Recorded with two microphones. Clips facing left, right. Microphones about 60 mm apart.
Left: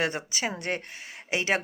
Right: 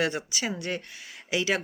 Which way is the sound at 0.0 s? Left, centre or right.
Left.